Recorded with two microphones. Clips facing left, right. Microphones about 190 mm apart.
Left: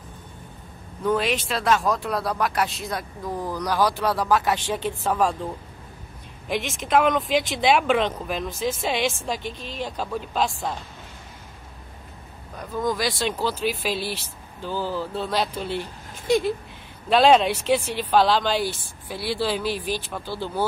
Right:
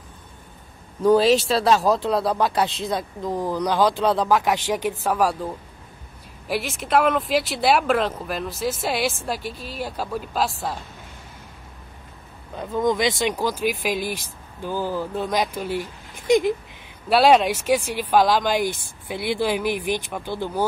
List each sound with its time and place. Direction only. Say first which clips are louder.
1.0 s speech: right 7 dB; 35° right (ahead or behind)
2.9 s speech: right 4 dB; 20° right (ahead or behind)
6.4 s speech: right 1 dB; 5° right (ahead or behind)
12.5 s speech: right 4 dB; 20° right (ahead or behind)